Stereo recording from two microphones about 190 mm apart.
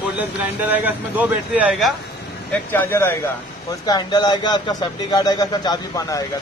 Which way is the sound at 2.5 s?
10° left (ahead or behind).